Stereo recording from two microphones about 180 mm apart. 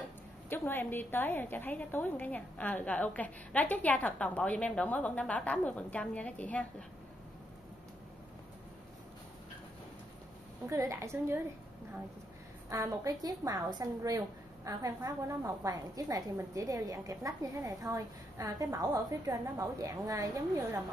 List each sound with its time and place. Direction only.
0.5 s a woman's voice: 10° left (ahead or behind)
10.7 s a woman's voice: 15° right (ahead or behind)
12.6 s a woman's voice: 15° right (ahead or behind)